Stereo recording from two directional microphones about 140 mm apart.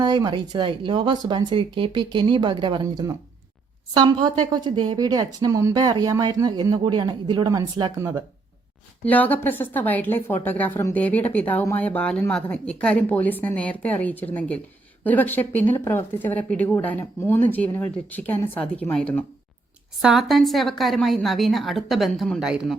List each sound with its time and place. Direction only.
0.0 s speech: 30° right (ahead or behind)
2.8 s speech: 25° right (ahead or behind)
9.0 s a woman's voice: 10° left (ahead or behind)
20.0 s a woman's voice: centre (ahead or behind)